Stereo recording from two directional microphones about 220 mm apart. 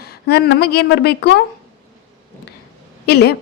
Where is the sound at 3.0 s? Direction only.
45° left (ahead or behind).